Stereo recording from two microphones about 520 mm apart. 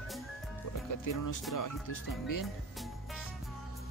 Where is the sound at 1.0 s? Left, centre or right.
Left.